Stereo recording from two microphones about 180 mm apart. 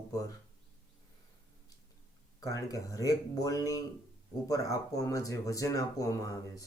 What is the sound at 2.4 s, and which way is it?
Speech, 20° left (ahead or behind).